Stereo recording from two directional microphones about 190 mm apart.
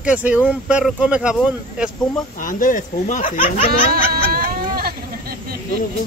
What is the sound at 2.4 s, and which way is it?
Speech, 45° left (ahead or behind).